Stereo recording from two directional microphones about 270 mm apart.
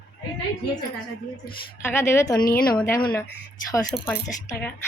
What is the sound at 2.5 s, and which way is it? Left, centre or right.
Speech, left.